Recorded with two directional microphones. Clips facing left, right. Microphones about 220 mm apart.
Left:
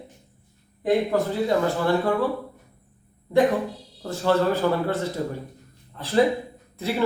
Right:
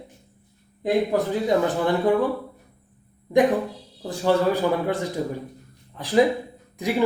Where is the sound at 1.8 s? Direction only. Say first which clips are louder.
Right 2 dB; 15° right (ahead or behind).